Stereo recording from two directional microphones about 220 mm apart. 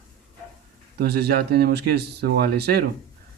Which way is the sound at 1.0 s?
45° right (ahead or behind).